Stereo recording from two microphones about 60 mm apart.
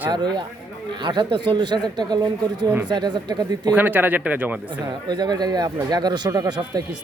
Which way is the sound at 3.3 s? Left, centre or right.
Right.